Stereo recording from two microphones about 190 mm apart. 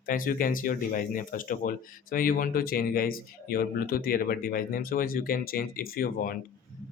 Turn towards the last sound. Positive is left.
turn(degrees=50)  # may be behind; listen again after turning